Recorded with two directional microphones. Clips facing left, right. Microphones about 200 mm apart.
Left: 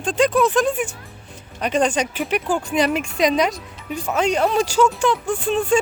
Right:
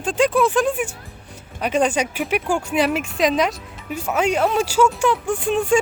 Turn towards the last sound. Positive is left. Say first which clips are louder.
# even
turn(degrees=-10)  # may be behind; listen again after turning